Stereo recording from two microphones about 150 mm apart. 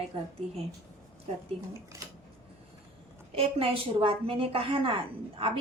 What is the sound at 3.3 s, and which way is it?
A woman's voice, 40° right (ahead or behind).